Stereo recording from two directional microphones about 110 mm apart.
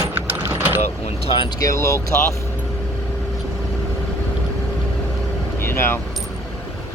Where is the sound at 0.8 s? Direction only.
85° left.